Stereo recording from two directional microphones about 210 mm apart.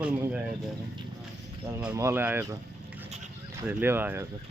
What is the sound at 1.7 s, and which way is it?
Speech, 10° right (ahead or behind).